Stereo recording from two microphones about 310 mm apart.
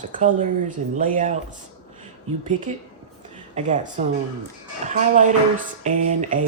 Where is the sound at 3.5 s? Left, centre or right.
Right.